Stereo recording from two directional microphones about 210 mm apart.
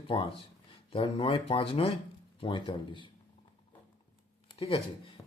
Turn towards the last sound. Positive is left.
turn(degrees=25)  # may be behind; listen again after turning